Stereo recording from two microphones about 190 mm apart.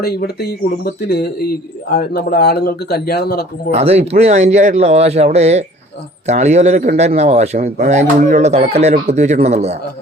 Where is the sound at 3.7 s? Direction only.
35° right (ahead or behind).